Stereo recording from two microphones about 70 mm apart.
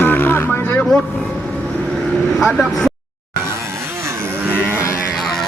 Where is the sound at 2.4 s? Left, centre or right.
Centre.